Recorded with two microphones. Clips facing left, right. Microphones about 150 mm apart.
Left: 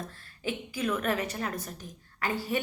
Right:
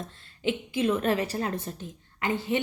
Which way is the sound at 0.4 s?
25° right (ahead or behind).